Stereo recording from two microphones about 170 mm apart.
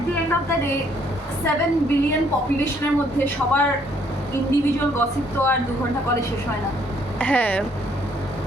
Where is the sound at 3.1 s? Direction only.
10° left (ahead or behind).